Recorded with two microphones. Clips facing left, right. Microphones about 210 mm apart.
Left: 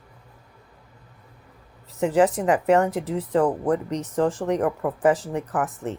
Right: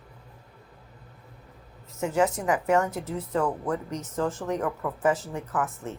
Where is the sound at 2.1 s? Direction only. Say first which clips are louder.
Left 5 dB; 35° left (ahead or behind).